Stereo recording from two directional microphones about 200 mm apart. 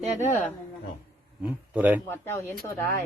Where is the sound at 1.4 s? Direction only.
10° right (ahead or behind).